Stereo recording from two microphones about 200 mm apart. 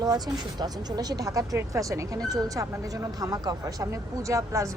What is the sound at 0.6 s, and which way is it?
A woman's voice, 20° right (ahead or behind).